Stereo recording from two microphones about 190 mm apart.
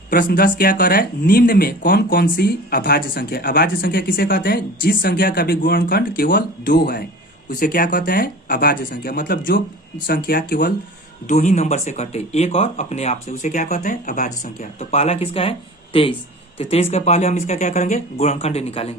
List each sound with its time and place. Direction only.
0.1 s speech: 50° left (ahead or behind)
11.3 s speech: 40° left (ahead or behind)